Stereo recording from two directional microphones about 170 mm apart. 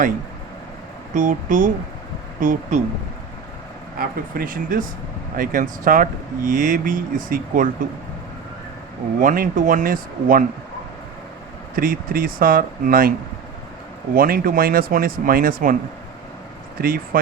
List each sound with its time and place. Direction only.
1.1 s speech: 50° right (ahead or behind)
3.9 s speech: 55° right (ahead or behind)
9.2 s speech: 50° right (ahead or behind)
11.7 s speech: 55° right (ahead or behind)
14.2 s speech: 60° right (ahead or behind)
16.7 s speech: 60° right (ahead or behind)